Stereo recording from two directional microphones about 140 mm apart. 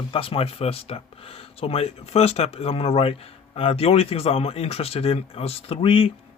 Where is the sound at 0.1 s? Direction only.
40° left (ahead or behind).